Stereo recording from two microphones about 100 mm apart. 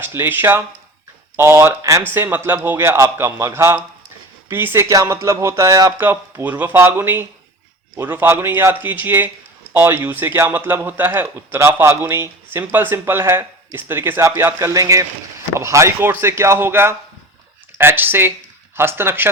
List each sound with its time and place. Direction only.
0.0 s a man's voice: 20° right (ahead or behind)